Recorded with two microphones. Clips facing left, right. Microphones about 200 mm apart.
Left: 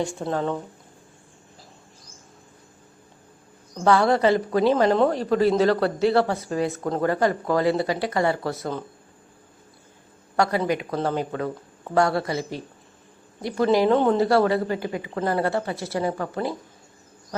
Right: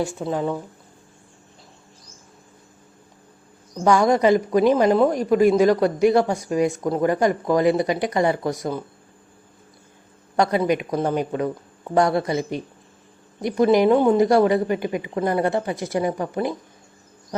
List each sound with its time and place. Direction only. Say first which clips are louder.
0.2 s speech: right 1 dB; 5° right (ahead or behind)
3.8 s speech: right 2 dB; 15° right (ahead or behind)
10.3 s speech: right 3 dB; 20° right (ahead or behind)